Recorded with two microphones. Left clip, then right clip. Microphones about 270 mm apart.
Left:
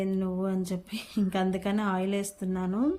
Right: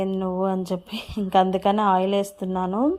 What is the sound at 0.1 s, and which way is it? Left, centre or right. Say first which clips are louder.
Speech: right 7 dB; right.